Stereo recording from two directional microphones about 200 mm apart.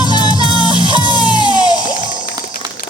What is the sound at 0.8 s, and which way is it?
Music, 25° right (ahead or behind).